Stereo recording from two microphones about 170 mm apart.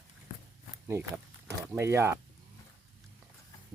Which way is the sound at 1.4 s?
15° right (ahead or behind).